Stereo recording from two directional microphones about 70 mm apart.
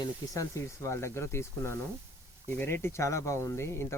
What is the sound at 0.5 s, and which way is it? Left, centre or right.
Speech, left.